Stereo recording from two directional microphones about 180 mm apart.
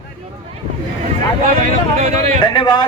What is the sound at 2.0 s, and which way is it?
Speech, 40° right (ahead or behind).